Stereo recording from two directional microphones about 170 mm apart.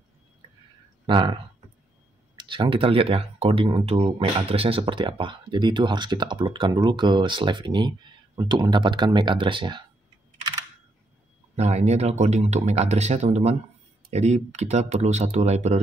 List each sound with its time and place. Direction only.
1.0 s speech: 30° right (ahead or behind)
11.5 s speech: 40° right (ahead or behind)